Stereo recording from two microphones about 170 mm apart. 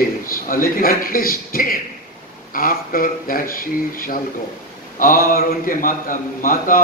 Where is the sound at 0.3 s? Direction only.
55° left (ahead or behind).